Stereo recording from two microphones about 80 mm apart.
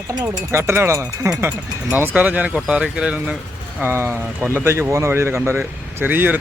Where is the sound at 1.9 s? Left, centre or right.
Right.